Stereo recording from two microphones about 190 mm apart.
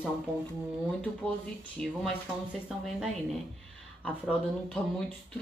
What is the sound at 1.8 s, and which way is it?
Speech, 5° left (ahead or behind).